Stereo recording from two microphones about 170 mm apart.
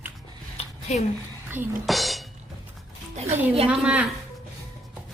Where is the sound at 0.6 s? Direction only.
35° left (ahead or behind).